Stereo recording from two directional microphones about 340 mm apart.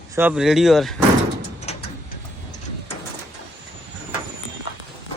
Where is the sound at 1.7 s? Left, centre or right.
Centre.